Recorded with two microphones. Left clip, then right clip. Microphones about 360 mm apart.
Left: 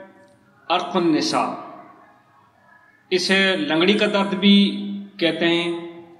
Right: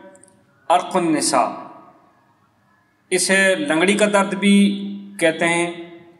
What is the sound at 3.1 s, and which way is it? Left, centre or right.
A man's voice, centre.